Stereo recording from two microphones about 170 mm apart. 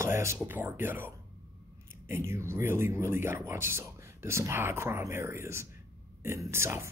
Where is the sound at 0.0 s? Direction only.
15° right (ahead or behind).